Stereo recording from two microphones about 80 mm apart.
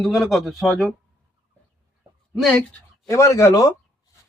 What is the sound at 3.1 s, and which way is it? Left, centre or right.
Speech, left.